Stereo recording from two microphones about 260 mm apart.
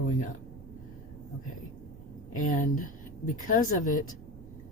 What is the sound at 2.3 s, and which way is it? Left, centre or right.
Speech, left.